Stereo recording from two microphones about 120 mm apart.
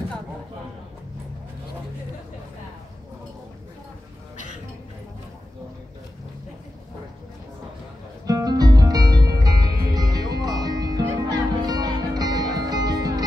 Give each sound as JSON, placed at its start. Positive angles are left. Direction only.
{"t": 8.3, "sound": "music", "side_deg": -30}